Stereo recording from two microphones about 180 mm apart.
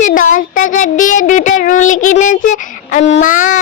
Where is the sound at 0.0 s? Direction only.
45° left (ahead or behind).